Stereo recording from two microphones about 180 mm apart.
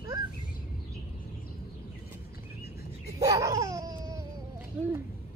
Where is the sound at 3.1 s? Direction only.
20° right (ahead or behind).